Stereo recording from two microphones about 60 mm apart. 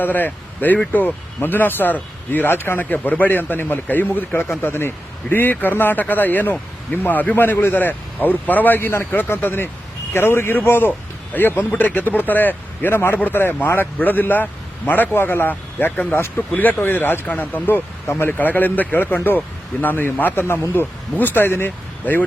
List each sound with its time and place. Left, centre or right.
0.0 s speech: left